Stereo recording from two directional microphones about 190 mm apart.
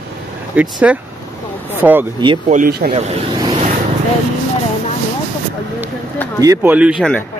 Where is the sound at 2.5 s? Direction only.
50° right (ahead or behind).